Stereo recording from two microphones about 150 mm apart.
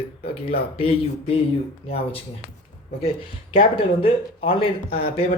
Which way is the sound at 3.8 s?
40° left (ahead or behind).